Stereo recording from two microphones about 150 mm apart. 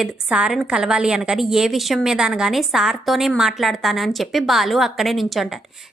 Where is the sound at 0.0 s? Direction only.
5° right (ahead or behind).